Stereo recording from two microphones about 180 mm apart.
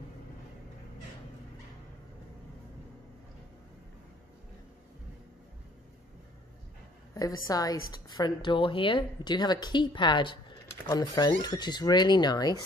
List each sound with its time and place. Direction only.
7.4 s a woman's voice: 20° left (ahead or behind)